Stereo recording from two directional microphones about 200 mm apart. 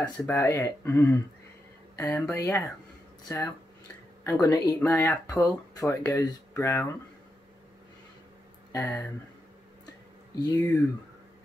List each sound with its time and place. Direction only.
0.0 s speech: 15° left (ahead or behind)
4.2 s speech: 15° left (ahead or behind)
8.7 s speech: 15° left (ahead or behind)
10.4 s speech: 20° left (ahead or behind)